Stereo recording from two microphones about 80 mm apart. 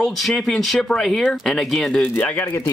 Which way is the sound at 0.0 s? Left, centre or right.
Centre.